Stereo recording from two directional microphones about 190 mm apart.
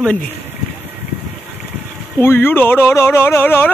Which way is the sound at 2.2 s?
10° left (ahead or behind).